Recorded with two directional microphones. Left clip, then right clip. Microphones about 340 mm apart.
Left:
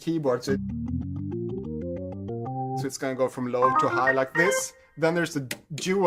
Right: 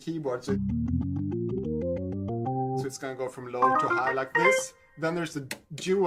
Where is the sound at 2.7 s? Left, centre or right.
Left.